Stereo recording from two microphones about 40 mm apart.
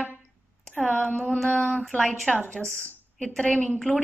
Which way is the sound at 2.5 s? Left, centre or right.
Left.